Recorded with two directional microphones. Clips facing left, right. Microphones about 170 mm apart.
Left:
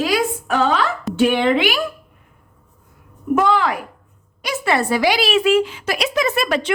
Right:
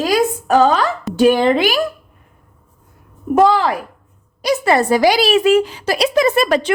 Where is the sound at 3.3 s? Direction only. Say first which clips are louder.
Right 4 dB; 35° right (ahead or behind).